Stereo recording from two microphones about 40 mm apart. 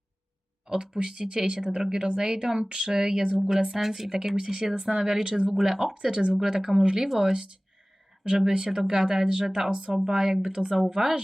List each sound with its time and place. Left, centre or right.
0.7 s speech: right
5.9 s speech: centre